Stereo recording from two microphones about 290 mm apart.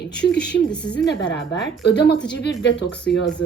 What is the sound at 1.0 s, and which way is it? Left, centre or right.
Speech, left.